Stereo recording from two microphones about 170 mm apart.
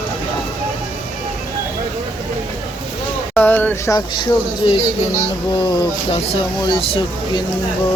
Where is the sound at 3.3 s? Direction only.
10° left (ahead or behind).